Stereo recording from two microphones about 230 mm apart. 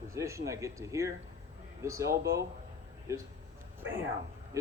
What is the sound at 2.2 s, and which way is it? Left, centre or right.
Speech, right.